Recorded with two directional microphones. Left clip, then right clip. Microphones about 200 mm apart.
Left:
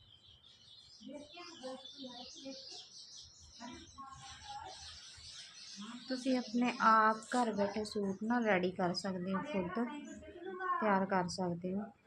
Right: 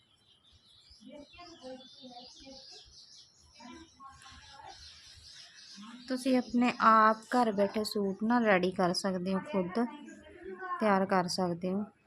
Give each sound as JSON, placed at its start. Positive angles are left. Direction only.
{"t": 6.1, "sound": "a woman's voice", "side_deg": -55}